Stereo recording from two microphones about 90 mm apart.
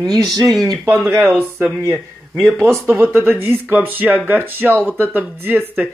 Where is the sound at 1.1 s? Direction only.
30° right (ahead or behind).